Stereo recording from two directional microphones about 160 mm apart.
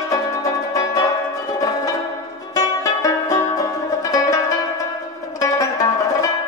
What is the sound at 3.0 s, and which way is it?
Music, 20° left (ahead or behind).